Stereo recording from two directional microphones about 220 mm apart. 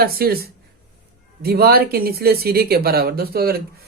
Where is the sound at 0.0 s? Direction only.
45° right (ahead or behind).